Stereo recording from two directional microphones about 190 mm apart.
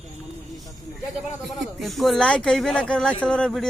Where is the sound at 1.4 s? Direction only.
Centre (ahead or behind).